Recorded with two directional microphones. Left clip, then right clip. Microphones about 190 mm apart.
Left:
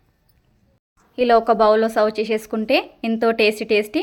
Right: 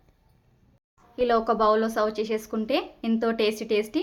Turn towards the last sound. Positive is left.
turn(degrees=30)  # may be behind; listen again after turning